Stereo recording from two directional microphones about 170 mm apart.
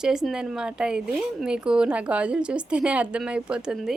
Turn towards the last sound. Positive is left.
turn(degrees=-5)  # may be behind; listen again after turning